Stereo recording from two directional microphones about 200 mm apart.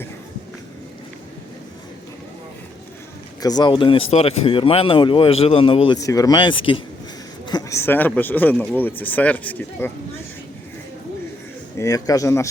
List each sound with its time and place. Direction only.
3.4 s speech: 20° left (ahead or behind)
11.8 s speech: 15° left (ahead or behind)